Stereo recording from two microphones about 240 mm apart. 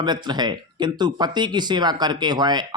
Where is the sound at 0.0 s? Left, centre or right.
Centre.